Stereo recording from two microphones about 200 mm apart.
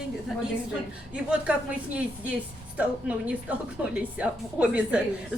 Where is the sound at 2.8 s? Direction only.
5° right (ahead or behind).